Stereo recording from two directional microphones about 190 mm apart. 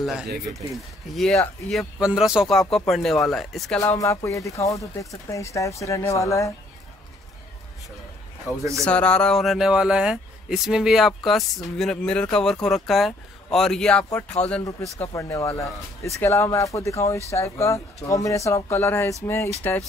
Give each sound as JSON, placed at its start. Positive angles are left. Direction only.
{"t": 0.0, "sound": "speech", "side_deg": -5}
{"t": 3.8, "sound": "speech", "side_deg": 15}
{"t": 8.8, "sound": "speech", "side_deg": 5}